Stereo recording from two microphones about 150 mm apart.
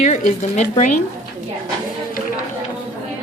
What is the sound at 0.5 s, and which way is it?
Speech, 55° left (ahead or behind).